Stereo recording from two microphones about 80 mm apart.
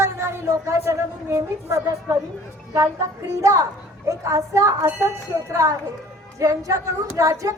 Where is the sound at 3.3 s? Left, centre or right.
Right.